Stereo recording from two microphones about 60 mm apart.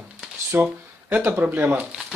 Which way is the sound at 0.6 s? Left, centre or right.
Right.